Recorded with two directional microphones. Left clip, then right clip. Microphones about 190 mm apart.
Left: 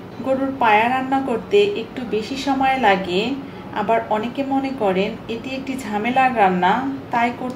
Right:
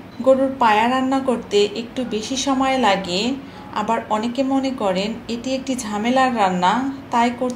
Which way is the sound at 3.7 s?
50° right (ahead or behind).